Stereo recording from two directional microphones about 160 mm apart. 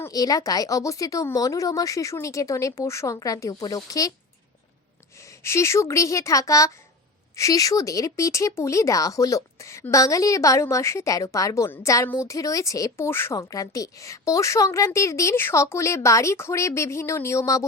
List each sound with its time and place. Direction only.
0.0 s a woman's voice: 25° left (ahead or behind)
5.1 s a woman's voice: 20° left (ahead or behind)